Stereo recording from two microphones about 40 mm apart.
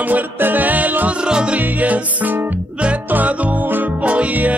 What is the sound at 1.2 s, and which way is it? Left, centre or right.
Music, right.